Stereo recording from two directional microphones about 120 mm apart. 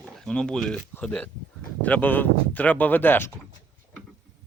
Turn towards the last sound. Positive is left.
turn(degrees=15)  # may be behind; listen again after turning